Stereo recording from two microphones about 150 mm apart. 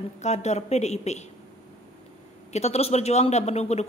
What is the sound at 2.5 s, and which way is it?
Speech, 45° left (ahead or behind).